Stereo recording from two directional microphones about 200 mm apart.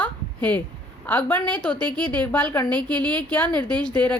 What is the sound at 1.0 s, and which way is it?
A woman's voice, 10° left (ahead or behind).